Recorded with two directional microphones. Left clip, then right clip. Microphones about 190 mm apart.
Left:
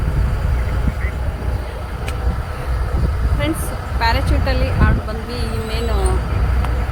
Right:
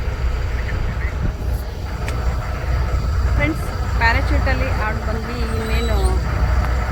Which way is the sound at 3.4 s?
10° left (ahead or behind).